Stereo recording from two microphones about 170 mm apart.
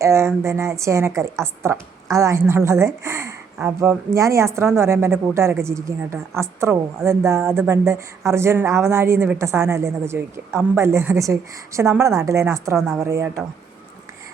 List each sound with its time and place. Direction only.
0.0 s a woman's voice: 15° right (ahead or behind)